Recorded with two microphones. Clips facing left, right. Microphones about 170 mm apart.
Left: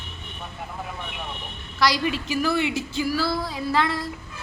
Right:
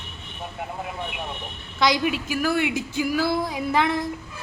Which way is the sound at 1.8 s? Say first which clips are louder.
Right 1 dB; 15° right (ahead or behind).